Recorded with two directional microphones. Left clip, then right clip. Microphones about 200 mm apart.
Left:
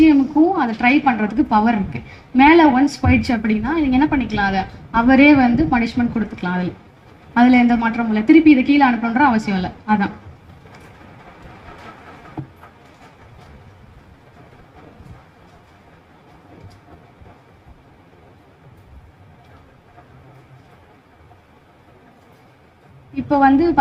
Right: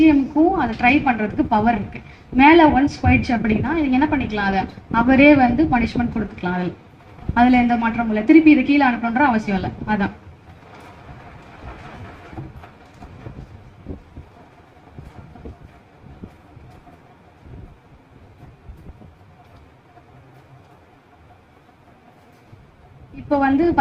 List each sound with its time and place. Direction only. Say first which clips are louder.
0.0 s a woman's voice: left 2 dB; 45° left (ahead or behind)
23.3 s a woman's voice: left 3 dB; 45° left (ahead or behind)